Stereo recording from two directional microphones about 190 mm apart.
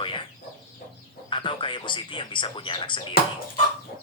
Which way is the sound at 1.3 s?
25° left (ahead or behind).